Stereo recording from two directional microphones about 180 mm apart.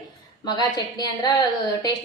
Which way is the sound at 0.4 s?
25° left (ahead or behind).